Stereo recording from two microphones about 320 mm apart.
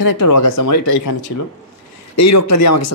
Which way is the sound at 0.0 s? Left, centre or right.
Left.